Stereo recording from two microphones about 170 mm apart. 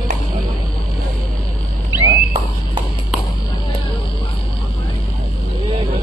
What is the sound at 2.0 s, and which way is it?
Walk, 25° right (ahead or behind).